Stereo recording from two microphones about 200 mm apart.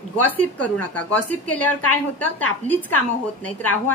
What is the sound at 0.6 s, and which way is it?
A woman's voice, 5° left (ahead or behind).